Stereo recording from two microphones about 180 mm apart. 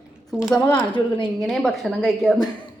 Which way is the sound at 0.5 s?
10° left (ahead or behind).